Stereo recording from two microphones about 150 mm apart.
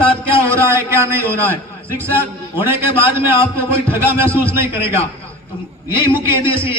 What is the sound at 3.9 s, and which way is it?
Speech, 15° right (ahead or behind).